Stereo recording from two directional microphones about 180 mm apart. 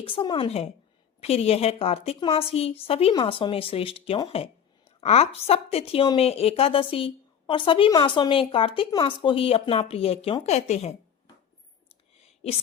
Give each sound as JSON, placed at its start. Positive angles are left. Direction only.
{"t": 0.0, "sound": "a woman's voice", "side_deg": 30}